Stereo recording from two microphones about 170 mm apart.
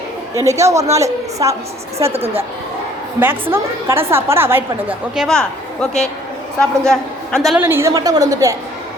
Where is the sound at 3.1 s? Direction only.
15° right (ahead or behind).